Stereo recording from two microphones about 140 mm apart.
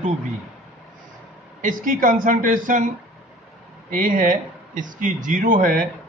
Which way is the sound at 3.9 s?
80° right.